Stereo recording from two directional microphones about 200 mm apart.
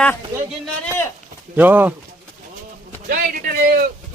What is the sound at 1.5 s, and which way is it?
Speech, 10° right (ahead or behind).